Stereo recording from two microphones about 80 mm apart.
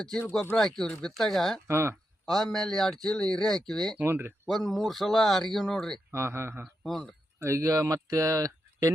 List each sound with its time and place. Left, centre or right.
0.5 s speech: centre
1.6 s speech: right
2.2 s speech: centre
3.9 s speech: right
4.4 s speech: centre
6.1 s speech: right
6.8 s speech: centre
7.3 s speech: right